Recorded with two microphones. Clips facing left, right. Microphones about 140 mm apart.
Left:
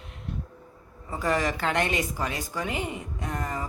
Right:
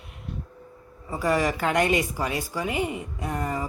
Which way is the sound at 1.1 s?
10° right (ahead or behind).